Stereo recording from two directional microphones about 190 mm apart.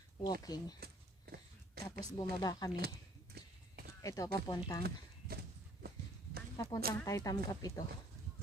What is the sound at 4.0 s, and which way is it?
Speech, 15° left (ahead or behind).